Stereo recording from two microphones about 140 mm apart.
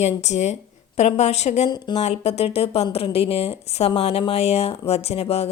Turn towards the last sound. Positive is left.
turn(degrees=45)  # may be behind; listen again after turning